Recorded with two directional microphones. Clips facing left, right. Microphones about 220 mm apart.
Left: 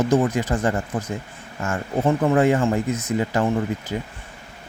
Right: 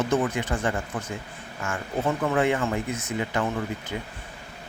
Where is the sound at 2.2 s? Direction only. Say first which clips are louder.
Left 6 dB; 35° left (ahead or behind).